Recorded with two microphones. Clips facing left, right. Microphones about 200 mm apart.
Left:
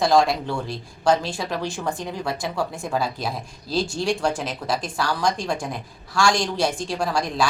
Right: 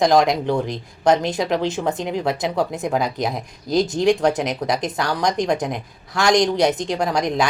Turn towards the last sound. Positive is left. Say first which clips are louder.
# right 4 dB
turn(degrees=-20)  # may be behind; listen again after turning